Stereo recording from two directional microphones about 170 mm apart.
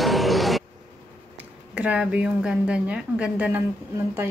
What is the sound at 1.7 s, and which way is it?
A woman's voice, 5° right (ahead or behind).